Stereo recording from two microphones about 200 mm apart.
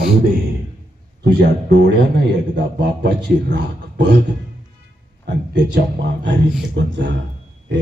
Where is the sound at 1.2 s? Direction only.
55° right (ahead or behind).